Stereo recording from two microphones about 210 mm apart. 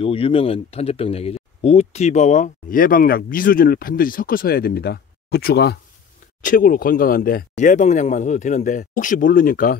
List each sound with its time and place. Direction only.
0.0 s speech: 25° left (ahead or behind); by 9.8 s 40° left (ahead or behind)